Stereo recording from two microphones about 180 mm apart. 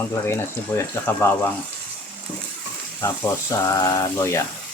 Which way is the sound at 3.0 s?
15° left (ahead or behind).